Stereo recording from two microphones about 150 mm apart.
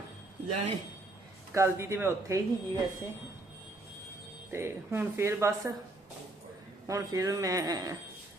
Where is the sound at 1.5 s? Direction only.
20° right (ahead or behind).